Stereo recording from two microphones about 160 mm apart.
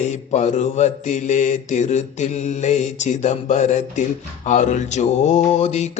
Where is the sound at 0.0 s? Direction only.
45° left (ahead or behind).